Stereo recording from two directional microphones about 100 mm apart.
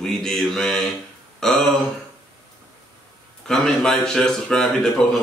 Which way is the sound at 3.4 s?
5° left (ahead or behind).